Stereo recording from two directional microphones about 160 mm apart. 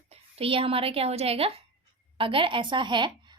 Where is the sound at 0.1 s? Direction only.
35° right (ahead or behind).